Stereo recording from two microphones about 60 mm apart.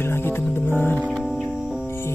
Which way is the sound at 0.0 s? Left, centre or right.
Left.